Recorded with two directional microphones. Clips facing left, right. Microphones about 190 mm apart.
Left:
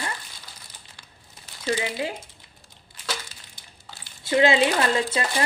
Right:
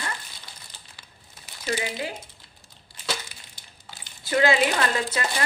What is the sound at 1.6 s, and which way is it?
Speech, 25° left (ahead or behind).